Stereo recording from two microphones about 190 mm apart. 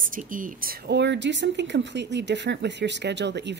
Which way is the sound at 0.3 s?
45° right (ahead or behind).